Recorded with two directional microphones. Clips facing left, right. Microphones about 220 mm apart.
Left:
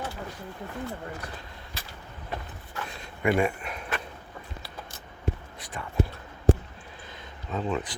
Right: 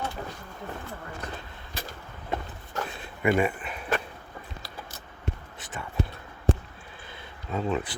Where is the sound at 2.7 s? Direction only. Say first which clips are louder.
Right 5 dB; 40° right (ahead or behind).